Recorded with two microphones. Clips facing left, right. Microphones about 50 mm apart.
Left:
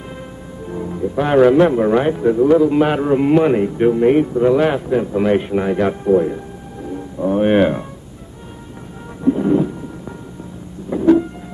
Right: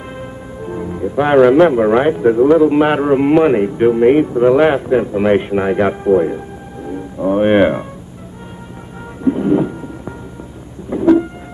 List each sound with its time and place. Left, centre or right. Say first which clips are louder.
0.2 s music: right 4 dB; centre
2.2 s a man's voice: right 3 dB; right
9.2 s thunder: right 1 dB; centre
10.9 s vehicle: right 2 dB; centre